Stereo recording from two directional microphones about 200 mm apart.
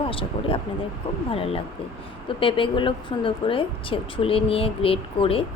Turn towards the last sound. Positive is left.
turn(degrees=25)  # may be behind; listen again after turning